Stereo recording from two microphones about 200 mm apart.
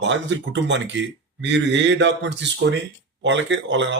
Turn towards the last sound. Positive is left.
turn(degrees=-65)  # may be behind; listen again after turning